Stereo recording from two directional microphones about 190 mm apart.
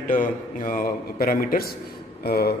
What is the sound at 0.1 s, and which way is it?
A man's voice, 45° left (ahead or behind).